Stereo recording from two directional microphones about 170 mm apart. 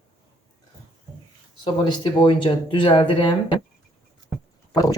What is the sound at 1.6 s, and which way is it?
Speech, 25° left (ahead or behind).